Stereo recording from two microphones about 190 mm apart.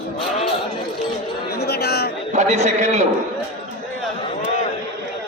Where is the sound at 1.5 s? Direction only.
55° left (ahead or behind).